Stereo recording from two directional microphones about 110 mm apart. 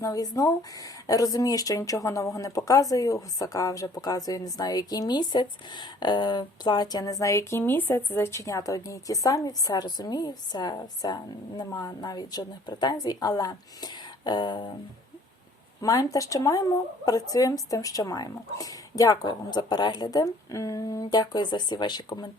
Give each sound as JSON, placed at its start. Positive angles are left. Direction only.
{"t": 0.0, "sound": "speech", "side_deg": 35}
{"t": 15.8, "sound": "speech", "side_deg": 30}